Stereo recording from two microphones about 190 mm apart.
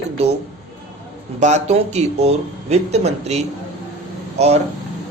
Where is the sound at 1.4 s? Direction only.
35° right (ahead or behind).